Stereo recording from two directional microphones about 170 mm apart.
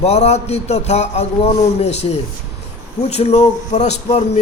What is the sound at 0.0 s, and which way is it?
Speech, 40° left (ahead or behind).